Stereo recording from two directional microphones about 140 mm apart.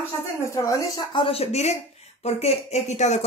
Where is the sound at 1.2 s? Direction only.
45° left (ahead or behind).